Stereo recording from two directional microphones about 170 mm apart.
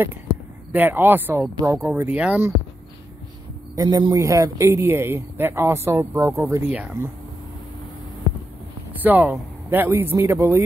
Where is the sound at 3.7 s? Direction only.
20° right (ahead or behind).